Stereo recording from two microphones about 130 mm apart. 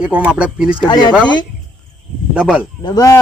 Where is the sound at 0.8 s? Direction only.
35° left (ahead or behind).